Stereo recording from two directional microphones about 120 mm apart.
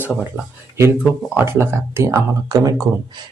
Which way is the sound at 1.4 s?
20° right (ahead or behind).